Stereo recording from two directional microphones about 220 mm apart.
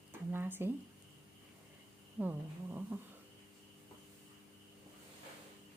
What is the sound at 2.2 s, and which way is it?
Speech, 10° right (ahead or behind).